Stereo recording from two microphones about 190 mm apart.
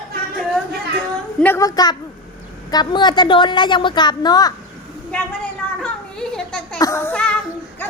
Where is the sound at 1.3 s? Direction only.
10° left (ahead or behind).